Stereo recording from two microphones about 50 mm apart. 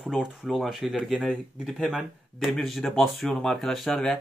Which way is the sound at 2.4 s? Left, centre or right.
Centre.